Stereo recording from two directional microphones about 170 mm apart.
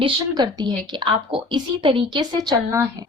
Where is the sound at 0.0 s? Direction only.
25° right (ahead or behind).